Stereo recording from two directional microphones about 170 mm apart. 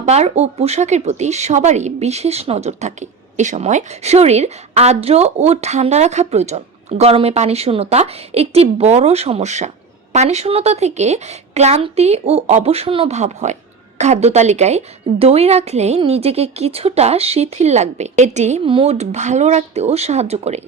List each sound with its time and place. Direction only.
0.0 s speech: 40° right (ahead or behind)